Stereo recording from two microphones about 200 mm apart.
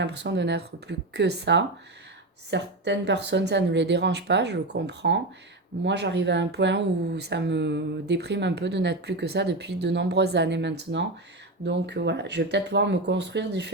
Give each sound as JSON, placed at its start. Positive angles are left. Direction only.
{"t": 0.0, "sound": "speech", "side_deg": -60}